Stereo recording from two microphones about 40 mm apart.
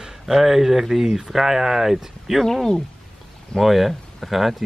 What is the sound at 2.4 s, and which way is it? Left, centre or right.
Speech, centre.